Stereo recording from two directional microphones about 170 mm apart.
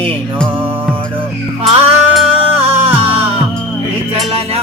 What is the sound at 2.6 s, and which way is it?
Music, 35° right (ahead or behind).